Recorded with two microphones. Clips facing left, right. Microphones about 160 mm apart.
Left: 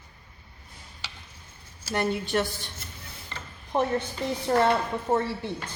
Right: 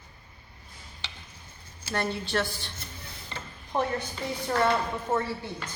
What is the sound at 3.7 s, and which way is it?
Speech, 20° left (ahead or behind).